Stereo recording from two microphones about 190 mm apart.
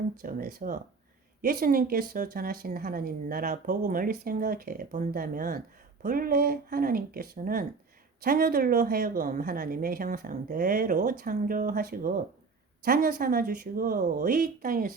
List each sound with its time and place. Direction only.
0.2 s speech: 45° right (ahead or behind)